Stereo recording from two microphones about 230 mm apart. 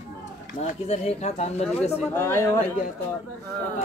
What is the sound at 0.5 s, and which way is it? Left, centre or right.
Speech, left.